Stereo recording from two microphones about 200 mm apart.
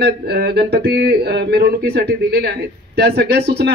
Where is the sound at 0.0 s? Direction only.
55° right (ahead or behind).